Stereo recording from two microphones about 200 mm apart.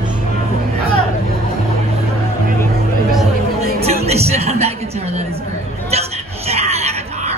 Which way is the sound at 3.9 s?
30° right (ahead or behind).